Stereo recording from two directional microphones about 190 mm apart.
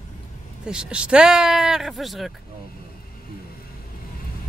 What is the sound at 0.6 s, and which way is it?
Speech, 5° right (ahead or behind).